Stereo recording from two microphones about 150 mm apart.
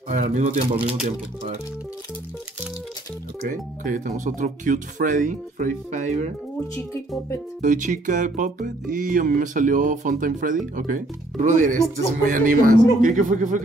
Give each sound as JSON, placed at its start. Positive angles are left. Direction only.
{"t": 0.4, "sound": "speech", "side_deg": -45}
{"t": 3.4, "sound": "music", "side_deg": -60}
{"t": 7.6, "sound": "music", "side_deg": -60}